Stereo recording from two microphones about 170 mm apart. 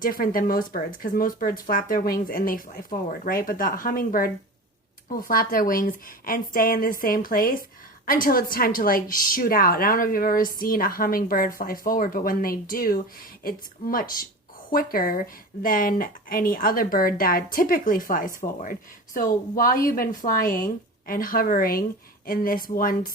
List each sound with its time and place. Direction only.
0.0 s speech: 55° left (ahead or behind)